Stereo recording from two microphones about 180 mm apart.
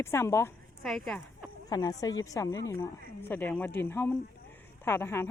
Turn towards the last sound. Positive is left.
turn(degrees=15)  # may be behind; listen again after turning